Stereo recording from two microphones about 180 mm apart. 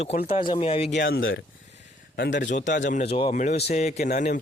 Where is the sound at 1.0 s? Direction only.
80° left.